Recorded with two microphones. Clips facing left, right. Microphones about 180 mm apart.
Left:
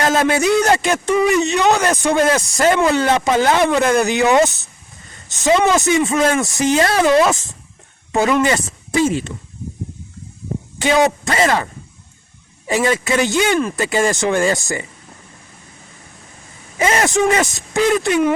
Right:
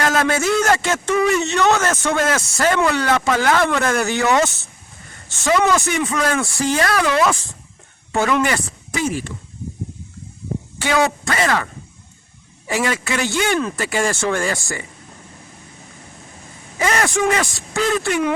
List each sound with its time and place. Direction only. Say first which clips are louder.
0.0 s speech: left 3 dB; 20° left (ahead or behind)
10.8 s speech: left 4 dB; 20° left (ahead or behind)
12.6 s speech: left 4 dB; 20° left (ahead or behind)
16.7 s speech: left 3 dB; 20° left (ahead or behind)